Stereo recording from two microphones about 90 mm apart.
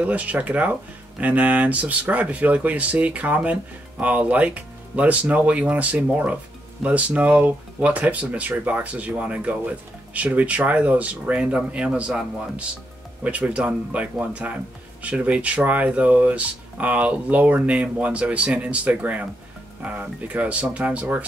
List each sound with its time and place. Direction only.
0.0 s speech: 15° right (ahead or behind)